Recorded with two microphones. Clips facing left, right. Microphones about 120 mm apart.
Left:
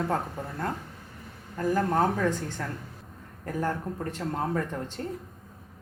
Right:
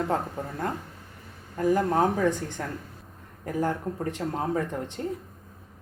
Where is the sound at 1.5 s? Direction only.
10° right (ahead or behind).